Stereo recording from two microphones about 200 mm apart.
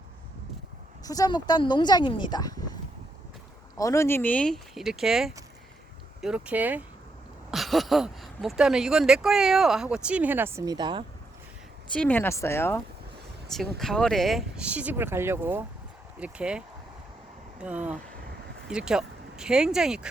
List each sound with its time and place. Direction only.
1.0 s speech: 20° left (ahead or behind)
3.8 s speech: 15° left (ahead or behind); by 11.0 s 20° right (ahead or behind)
11.9 s speech: 10° left (ahead or behind)